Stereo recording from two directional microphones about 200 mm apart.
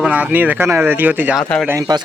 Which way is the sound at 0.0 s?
5° right (ahead or behind).